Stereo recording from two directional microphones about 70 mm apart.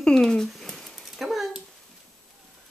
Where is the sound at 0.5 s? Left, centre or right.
Centre.